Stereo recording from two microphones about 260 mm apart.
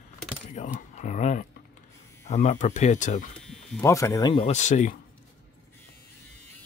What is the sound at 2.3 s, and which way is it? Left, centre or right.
Speech, left.